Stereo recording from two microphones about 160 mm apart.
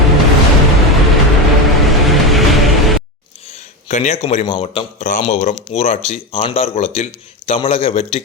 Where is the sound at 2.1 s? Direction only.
Centre (ahead or behind).